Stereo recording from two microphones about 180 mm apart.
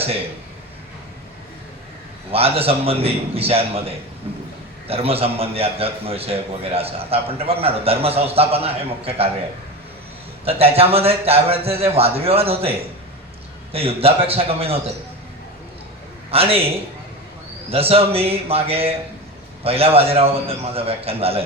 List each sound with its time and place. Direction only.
2.3 s a man's voice: 35° right (ahead or behind)
10.4 s a man's voice: 35° right (ahead or behind)
13.7 s a man's voice: 35° right (ahead or behind)
16.3 s a man's voice: 35° right (ahead or behind)
17.7 s a man's voice: 35° right (ahead or behind)